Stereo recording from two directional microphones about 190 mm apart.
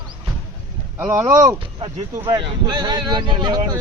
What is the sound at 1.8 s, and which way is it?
Speech, 25° right (ahead or behind).